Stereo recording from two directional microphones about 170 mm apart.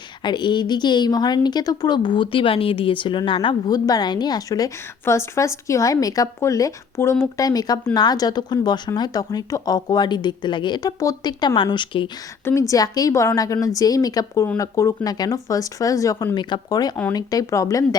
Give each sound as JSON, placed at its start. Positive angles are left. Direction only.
{"t": 0.2, "sound": "a woman's voice", "side_deg": 25}
{"t": 12.5, "sound": "a woman's voice", "side_deg": 15}